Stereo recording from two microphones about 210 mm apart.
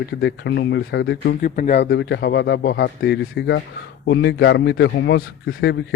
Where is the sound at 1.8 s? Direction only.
55° left (ahead or behind).